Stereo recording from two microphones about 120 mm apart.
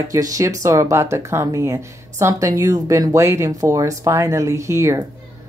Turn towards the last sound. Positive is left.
turn(degrees=-25)  # may be behind; listen again after turning